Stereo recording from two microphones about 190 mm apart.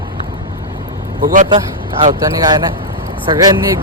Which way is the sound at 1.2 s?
45° right (ahead or behind).